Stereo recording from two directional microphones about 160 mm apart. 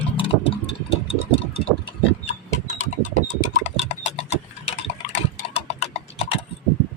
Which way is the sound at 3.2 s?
45° left (ahead or behind).